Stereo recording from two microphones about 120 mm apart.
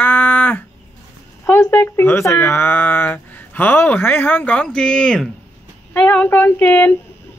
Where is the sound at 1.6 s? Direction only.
20° left (ahead or behind).